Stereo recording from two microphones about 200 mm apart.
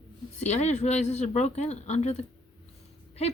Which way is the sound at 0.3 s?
35° left (ahead or behind).